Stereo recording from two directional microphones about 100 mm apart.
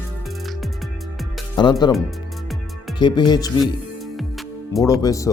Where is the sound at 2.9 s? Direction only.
45° left (ahead or behind).